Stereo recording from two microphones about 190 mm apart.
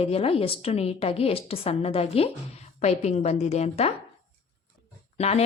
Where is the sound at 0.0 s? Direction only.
30° left (ahead or behind).